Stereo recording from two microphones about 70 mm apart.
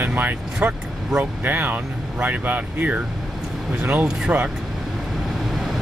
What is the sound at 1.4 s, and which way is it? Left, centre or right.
Speech, right.